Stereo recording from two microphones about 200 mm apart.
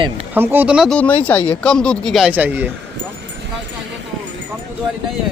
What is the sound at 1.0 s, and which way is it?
Speech, 10° left (ahead or behind).